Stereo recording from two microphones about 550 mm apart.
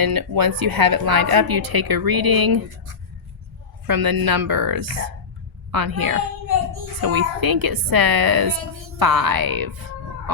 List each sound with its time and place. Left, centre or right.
0.0 s a woman's voice: right
3.8 s a woman's voice: right